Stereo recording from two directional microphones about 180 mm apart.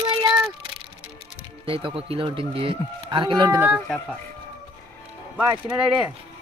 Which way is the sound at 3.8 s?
5° left (ahead or behind).